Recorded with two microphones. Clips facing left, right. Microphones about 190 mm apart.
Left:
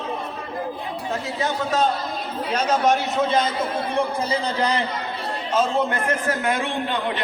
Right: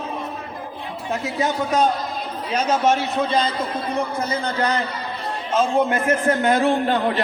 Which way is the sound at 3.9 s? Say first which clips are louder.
Left 1 dB; 30° left (ahead or behind).